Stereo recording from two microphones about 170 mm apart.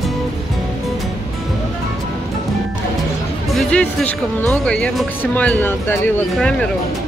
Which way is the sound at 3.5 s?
5° left (ahead or behind).